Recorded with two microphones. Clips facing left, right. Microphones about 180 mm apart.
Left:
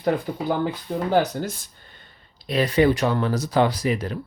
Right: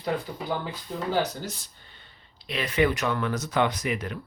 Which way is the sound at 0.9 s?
60° left (ahead or behind).